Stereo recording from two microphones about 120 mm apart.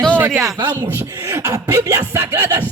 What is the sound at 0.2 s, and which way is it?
Music, 20° right (ahead or behind).